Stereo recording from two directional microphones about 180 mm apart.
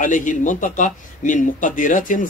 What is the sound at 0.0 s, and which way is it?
A man's voice, 45° left (ahead or behind).